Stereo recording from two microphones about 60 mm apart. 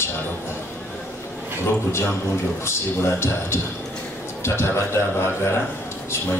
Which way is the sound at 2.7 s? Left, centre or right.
Left.